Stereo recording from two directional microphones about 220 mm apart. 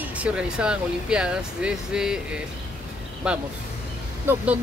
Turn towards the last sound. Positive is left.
turn(degrees=-5)  # may be behind; listen again after turning